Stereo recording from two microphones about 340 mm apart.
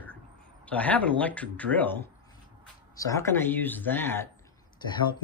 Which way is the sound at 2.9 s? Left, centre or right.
Centre.